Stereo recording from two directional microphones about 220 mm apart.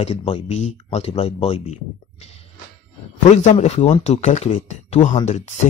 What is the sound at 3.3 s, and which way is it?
Speech, 30° left (ahead or behind).